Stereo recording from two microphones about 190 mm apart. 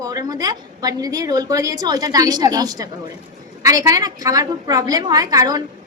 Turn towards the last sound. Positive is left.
turn(degrees=-20)  # may be behind; listen again after turning